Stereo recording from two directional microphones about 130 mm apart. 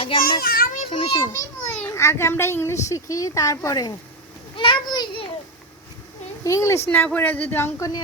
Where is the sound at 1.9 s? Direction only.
20° left (ahead or behind).